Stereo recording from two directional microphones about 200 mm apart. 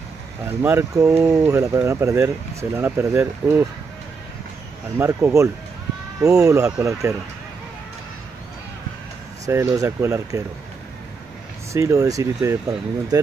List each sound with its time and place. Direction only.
0.5 s speech: 10° right (ahead or behind)
4.9 s speech: 15° right (ahead or behind)
9.5 s speech: 15° right (ahead or behind)
11.7 s speech: 15° right (ahead or behind)